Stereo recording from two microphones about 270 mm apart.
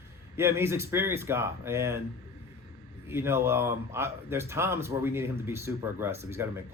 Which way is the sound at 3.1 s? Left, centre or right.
Centre.